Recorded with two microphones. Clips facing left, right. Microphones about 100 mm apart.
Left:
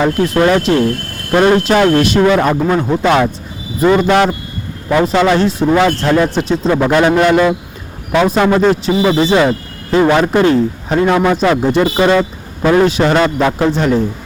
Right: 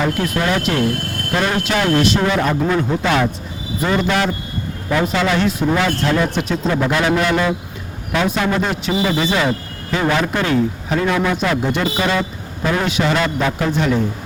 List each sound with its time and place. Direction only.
0.0 s a man's voice: 35° left (ahead or behind)
2.6 s a man's voice: 35° left (ahead or behind)
5.7 s a man's voice: 45° left (ahead or behind)